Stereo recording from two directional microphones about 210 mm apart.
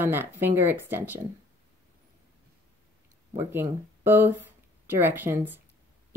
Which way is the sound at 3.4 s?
10° right (ahead or behind).